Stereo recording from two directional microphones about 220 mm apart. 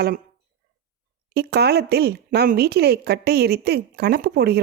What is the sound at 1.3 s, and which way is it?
A woman's voice, 45° right (ahead or behind).